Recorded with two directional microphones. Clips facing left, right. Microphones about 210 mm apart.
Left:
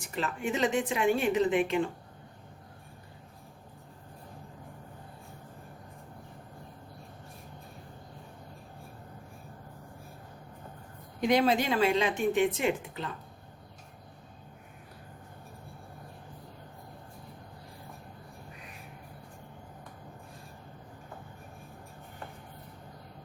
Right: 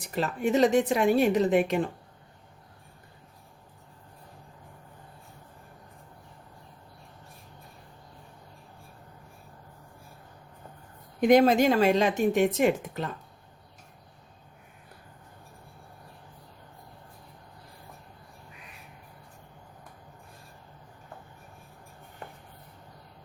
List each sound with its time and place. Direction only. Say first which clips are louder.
0.0 s a woman's voice: right 5 dB; 40° right (ahead or behind)
11.2 s speech: right 6 dB; 45° right (ahead or behind)